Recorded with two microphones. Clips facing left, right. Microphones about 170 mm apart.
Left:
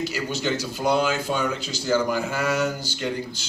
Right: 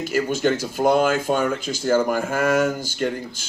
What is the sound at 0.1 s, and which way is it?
Speech, 50° right (ahead or behind).